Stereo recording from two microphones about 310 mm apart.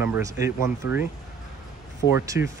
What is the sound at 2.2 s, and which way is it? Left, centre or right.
Speech, centre.